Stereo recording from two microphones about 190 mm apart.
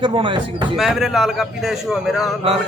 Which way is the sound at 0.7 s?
Centre (ahead or behind).